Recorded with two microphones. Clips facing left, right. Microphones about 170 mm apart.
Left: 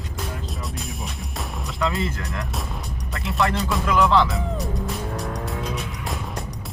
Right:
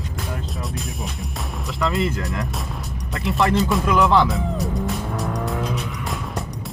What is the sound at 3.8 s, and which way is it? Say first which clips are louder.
Speech: even; 20° right (ahead or behind).